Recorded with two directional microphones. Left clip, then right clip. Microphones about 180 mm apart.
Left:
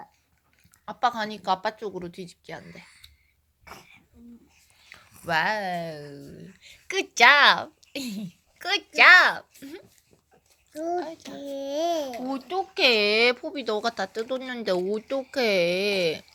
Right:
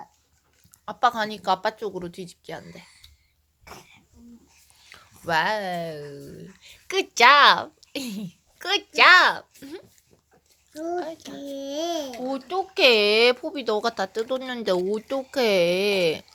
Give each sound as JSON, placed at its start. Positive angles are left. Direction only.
{"t": 0.9, "sound": "a woman's voice", "side_deg": -5}
{"t": 3.6, "sound": "throat clearing", "side_deg": -15}
{"t": 4.8, "sound": "whispering", "side_deg": -10}
{"t": 5.2, "sound": "speech", "side_deg": -5}
{"t": 10.9, "sound": "speech", "side_deg": -20}
{"t": 11.2, "sound": "a child's voice", "side_deg": 5}
{"t": 12.2, "sound": "speech", "side_deg": -20}
{"t": 13.0, "sound": "speech", "side_deg": -10}